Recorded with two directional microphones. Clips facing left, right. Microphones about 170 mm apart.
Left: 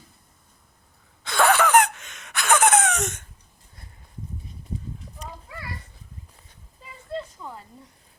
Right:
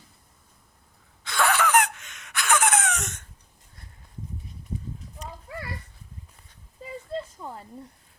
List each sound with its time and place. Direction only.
1.2 s wheeze: 25° left (ahead or behind)